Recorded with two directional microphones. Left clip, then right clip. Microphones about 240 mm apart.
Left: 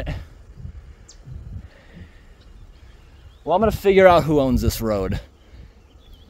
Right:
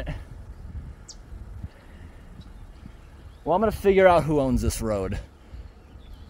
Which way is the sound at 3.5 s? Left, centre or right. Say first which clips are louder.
Left 4 dB; left.